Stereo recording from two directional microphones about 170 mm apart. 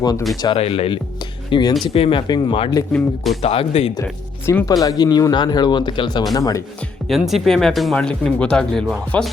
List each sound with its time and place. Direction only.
0.0 s speech: 25° left (ahead or behind)
4.4 s speech: 15° left (ahead or behind)
6.7 s speech: centre (ahead or behind)